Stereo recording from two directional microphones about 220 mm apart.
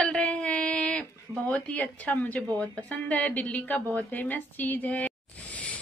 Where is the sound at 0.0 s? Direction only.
5° left (ahead or behind).